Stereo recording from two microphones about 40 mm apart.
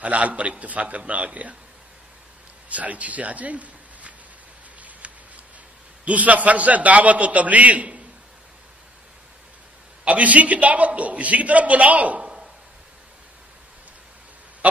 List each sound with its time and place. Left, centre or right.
0.0 s a man's voice: right
2.7 s a man's voice: right
5.0 s a sound: right
6.0 s a man's voice: right
10.0 s a man's voice: right
14.6 s goose: right